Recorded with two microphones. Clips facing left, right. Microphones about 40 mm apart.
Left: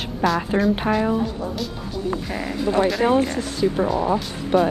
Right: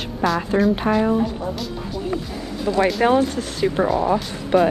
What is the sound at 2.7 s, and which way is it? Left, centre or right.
Speech, centre.